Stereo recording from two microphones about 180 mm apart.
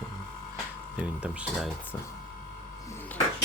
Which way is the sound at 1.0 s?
5° right (ahead or behind).